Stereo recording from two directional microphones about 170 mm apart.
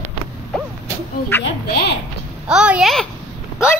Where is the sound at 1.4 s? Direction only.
75° left (ahead or behind).